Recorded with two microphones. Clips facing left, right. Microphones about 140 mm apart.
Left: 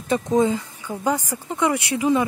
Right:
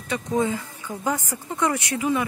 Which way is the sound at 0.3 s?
20° left (ahead or behind).